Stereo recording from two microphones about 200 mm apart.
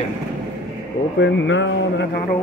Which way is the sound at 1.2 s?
70° left (ahead or behind).